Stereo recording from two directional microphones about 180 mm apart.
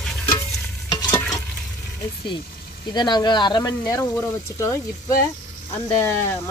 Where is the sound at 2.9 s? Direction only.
25° left (ahead or behind).